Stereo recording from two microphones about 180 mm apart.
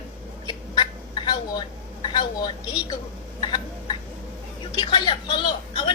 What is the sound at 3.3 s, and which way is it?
Hiccup, 25° left (ahead or behind).